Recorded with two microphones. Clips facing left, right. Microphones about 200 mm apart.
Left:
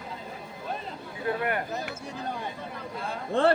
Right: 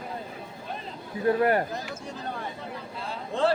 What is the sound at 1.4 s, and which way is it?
Speech, 35° right (ahead or behind).